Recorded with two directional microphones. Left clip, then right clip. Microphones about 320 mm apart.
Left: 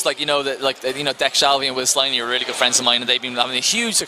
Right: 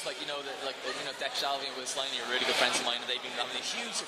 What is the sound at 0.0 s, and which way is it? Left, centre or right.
A man's voice, left.